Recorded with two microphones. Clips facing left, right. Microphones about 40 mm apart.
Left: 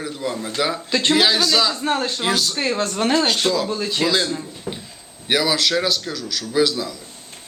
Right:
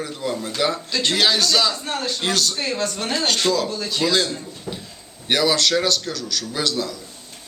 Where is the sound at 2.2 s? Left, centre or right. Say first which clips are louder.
Left 1 dB; centre.